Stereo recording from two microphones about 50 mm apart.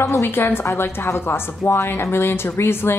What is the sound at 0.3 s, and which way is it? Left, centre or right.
Speech, left.